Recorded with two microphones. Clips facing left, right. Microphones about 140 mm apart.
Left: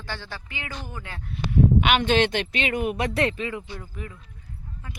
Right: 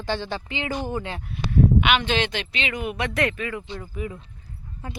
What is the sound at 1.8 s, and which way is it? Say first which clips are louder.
Speech: left 2 dB; 45° left (ahead or behind).